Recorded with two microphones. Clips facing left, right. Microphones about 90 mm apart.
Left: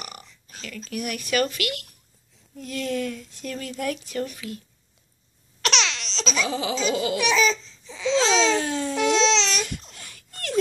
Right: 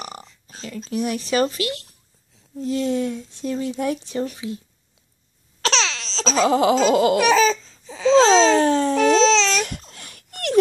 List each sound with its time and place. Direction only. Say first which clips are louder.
0.0 s speech: right 5 dB; 30° right (ahead or behind)
5.6 s laughter: right 3 dB; 35° right (ahead or behind); by 10.6 s 55° right (ahead or behind)